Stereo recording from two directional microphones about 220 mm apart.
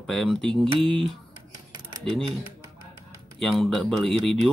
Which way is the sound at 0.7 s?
25° right (ahead or behind).